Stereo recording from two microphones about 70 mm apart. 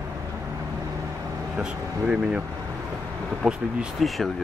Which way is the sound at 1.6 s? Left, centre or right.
Centre.